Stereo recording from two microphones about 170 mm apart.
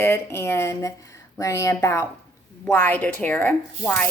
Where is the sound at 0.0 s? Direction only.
15° left (ahead or behind).